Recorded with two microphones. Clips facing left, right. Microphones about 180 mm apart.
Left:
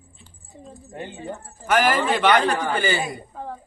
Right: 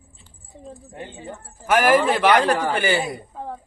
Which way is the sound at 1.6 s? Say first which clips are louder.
Right 3 dB; 5° right (ahead or behind).